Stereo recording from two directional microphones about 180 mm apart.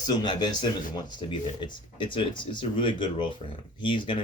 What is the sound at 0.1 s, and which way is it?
Speech, 25° left (ahead or behind).